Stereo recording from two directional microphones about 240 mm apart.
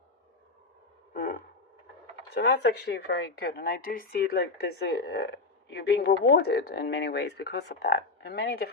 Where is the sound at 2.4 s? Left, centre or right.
Left.